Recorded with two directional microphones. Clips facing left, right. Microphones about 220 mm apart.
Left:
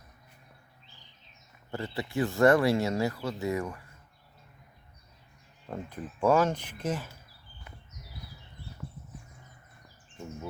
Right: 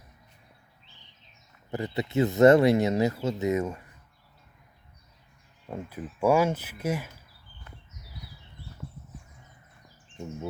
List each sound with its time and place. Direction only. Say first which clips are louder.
1.7 s speech: right 5 dB; 20° right (ahead or behind)
5.6 s speech: right 2 dB; 10° right (ahead or behind)